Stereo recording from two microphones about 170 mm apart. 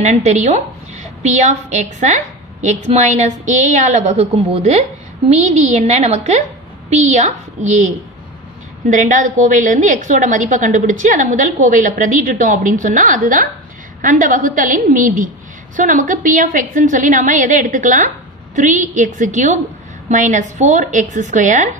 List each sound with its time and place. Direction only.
0.0 s a woman's voice: 40° right (ahead or behind)
8.9 s a woman's voice: 50° right (ahead or behind)